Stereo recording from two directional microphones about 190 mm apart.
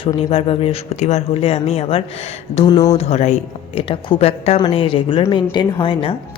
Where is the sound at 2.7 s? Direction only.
20° left (ahead or behind).